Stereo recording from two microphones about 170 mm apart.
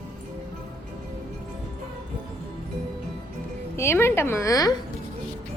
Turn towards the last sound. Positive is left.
turn(degrees=20)  # may be behind; listen again after turning